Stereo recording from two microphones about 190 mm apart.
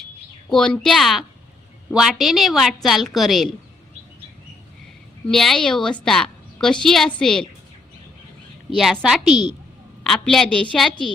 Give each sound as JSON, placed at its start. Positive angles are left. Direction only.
{"t": 0.5, "sound": "a woman's voice", "side_deg": 5}
{"t": 5.3, "sound": "a woman's voice", "side_deg": 0}
{"t": 8.7, "sound": "a woman's voice", "side_deg": 0}